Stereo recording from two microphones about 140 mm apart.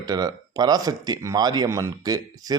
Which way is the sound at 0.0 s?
30° right (ahead or behind).